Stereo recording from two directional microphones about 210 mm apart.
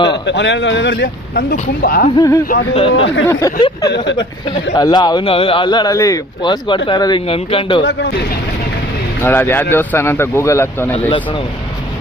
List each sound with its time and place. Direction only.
0.3 s speech: 55° left (ahead or behind)
2.1 s speech: 15° left (ahead or behind)
2.9 s speech: 60° left (ahead or behind)
3.2 s a man's voice: 15° left (ahead or behind)
7.9 s speech: 55° left (ahead or behind)
9.2 s speech: 10° left (ahead or behind)
10.9 s a man's voice: 25° left (ahead or behind)